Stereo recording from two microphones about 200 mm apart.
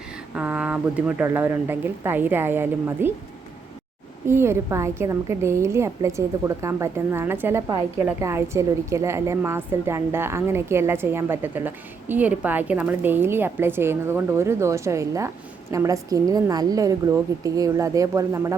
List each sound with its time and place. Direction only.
0.3 s a woman's voice: 5° right (ahead or behind)
4.3 s a woman's voice: 10° right (ahead or behind)